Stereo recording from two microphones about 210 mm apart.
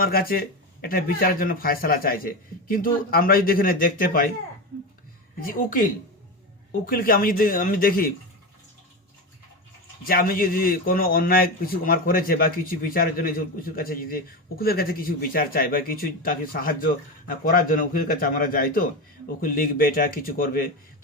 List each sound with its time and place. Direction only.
0.0 s speech: 45° left (ahead or behind)
5.4 s a woman's voice: 40° left (ahead or behind)
10.0 s speech: 45° left (ahead or behind)